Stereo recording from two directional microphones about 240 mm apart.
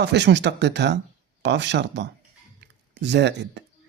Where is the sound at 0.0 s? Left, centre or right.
Right.